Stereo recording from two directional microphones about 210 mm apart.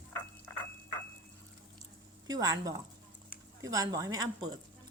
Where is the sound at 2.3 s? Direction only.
15° right (ahead or behind).